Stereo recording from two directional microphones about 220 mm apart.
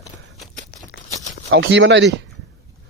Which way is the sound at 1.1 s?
35° left (ahead or behind).